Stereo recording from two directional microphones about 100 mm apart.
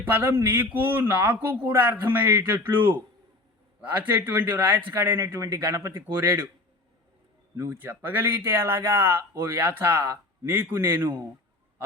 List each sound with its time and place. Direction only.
0.0 s speech: 20° right (ahead or behind)
7.7 s speech: 20° right (ahead or behind)